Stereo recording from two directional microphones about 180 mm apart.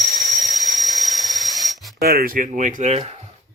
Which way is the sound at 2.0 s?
60° right (ahead or behind).